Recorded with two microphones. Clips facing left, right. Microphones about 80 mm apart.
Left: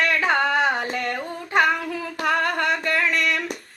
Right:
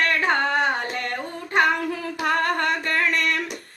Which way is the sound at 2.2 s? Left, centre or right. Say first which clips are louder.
Even; right.